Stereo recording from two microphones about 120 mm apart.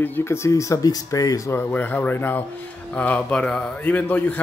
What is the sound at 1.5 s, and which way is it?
Speech, 15° left (ahead or behind).